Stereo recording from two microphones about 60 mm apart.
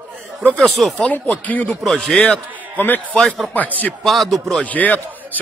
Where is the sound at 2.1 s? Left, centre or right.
Left.